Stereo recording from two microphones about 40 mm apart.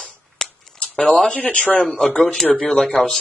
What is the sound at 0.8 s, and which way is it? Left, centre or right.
Speech, left.